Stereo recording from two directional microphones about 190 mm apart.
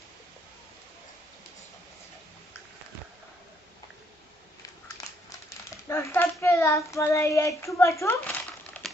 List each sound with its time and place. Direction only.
5.0 s crumpling: 20° left (ahead or behind)
5.9 s speech: 15° left (ahead or behind)